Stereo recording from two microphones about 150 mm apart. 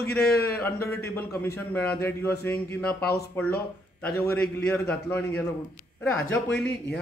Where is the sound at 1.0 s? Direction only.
15° left (ahead or behind).